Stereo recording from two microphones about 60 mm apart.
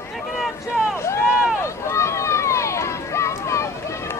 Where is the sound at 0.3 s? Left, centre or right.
Centre.